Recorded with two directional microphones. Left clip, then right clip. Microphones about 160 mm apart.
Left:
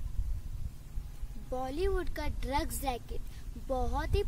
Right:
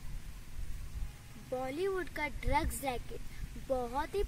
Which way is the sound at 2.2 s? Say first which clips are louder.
Right 1 dB; 35° left (ahead or behind).